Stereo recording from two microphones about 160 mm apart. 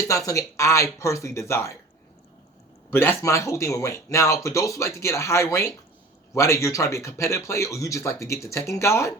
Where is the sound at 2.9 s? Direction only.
15° left (ahead or behind).